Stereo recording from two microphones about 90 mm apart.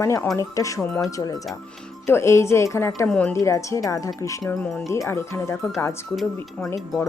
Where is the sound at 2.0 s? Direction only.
30° left (ahead or behind).